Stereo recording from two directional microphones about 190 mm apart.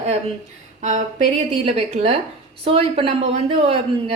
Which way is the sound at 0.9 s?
40° right (ahead or behind).